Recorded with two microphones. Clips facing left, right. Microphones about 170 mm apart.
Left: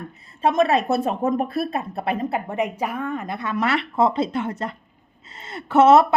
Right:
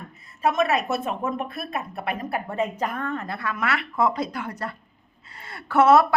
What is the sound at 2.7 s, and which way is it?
Speech, 10° left (ahead or behind).